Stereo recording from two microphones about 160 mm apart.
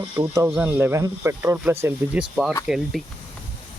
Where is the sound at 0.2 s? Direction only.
20° right (ahead or behind).